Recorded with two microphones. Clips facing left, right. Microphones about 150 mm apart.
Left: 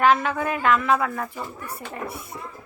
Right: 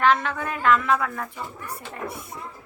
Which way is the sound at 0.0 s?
5° left (ahead or behind).